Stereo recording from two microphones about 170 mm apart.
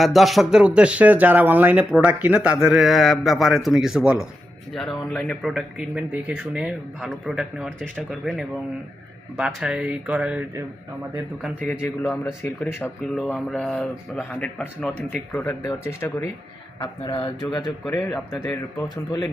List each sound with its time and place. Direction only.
0.0 s speech: centre (ahead or behind)
11.4 s speech: centre (ahead or behind)
11.8 s speech: 15° left (ahead or behind)
16.8 s speech: 30° left (ahead or behind)